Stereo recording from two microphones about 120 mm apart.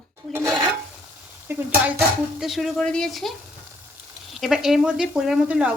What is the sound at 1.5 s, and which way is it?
Stir, 20° right (ahead or behind).